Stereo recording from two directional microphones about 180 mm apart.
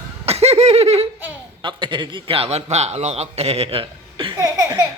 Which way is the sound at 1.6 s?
25° right (ahead or behind).